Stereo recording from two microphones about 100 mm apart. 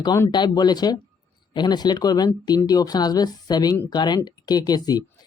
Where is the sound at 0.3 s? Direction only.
45° left (ahead or behind).